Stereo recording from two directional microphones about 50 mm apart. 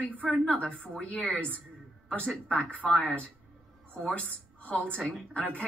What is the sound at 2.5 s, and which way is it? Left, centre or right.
A woman's voice, left.